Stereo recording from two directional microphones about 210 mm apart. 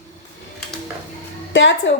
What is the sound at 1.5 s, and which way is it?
Speech, 60° left (ahead or behind).